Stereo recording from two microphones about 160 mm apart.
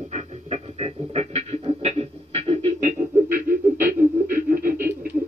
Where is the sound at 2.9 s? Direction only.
10° right (ahead or behind).